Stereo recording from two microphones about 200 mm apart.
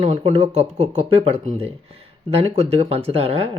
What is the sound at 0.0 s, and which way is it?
Speech, 25° right (ahead or behind).